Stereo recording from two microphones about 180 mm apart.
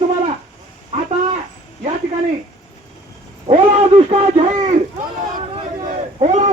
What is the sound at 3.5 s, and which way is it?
A man's voice, 35° right (ahead or behind).